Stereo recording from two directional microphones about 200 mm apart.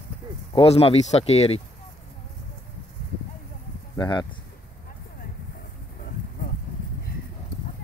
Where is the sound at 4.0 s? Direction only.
20° left (ahead or behind).